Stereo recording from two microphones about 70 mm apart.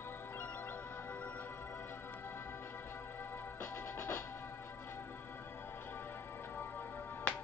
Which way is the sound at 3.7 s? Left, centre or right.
Left.